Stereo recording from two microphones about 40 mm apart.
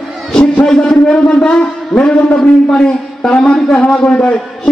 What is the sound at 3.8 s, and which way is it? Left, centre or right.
Speech, left.